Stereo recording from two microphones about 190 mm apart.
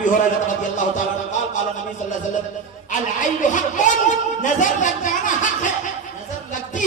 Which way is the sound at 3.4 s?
40° left (ahead or behind).